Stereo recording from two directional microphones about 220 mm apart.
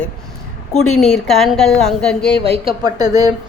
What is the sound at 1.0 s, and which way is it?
A woman's voice, centre (ahead or behind).